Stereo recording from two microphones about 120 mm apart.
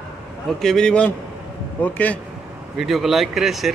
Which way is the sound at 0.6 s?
5° left (ahead or behind).